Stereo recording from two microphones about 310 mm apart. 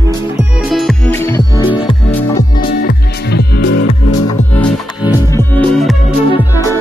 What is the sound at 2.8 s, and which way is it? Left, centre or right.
Music, left.